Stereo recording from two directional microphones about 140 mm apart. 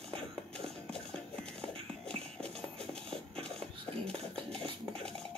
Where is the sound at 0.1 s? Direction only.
5° left (ahead or behind).